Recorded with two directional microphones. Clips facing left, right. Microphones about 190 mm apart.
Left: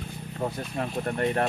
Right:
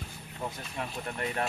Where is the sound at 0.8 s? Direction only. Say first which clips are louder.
Left 8 dB; 40° left (ahead or behind).